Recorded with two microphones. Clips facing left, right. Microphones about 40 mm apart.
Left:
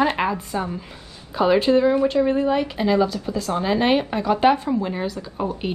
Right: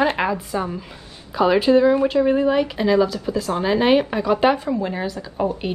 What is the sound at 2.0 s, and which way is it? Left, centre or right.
A woman's voice, centre.